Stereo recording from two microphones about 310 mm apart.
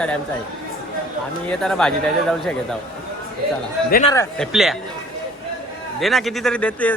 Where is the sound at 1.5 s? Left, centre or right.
Centre.